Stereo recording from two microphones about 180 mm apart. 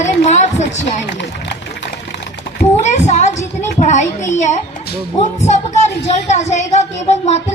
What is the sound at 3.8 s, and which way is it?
A child's voice, 40° left (ahead or behind).